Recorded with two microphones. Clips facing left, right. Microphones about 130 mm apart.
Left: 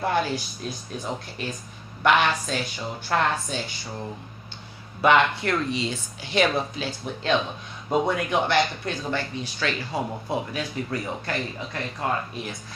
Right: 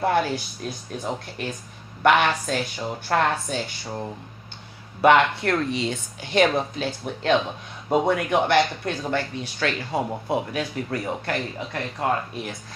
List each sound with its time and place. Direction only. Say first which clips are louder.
0.0 s a sound: right 2 dB; 55° right (ahead or behind)
1.4 s speech: right 1 dB; 60° right (ahead or behind)
5.0 s speech: right 2 dB; 55° right (ahead or behind)